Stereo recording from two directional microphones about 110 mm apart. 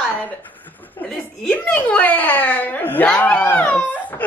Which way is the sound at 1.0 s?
10° left (ahead or behind).